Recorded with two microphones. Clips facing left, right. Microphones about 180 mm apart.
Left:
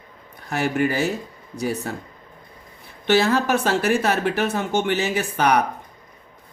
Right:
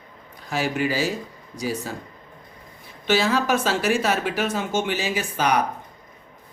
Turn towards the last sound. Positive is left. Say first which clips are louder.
# left 3 dB
turn(degrees=60)  # may be behind; listen again after turning